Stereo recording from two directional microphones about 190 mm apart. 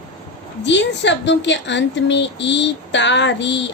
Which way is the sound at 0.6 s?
70° left (ahead or behind).